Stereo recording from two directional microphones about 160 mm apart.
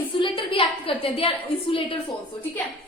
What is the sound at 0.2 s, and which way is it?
A woman's voice, 35° left (ahead or behind).